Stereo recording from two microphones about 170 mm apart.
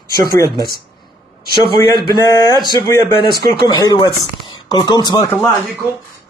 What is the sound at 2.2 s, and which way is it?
Speech, 20° left (ahead or behind).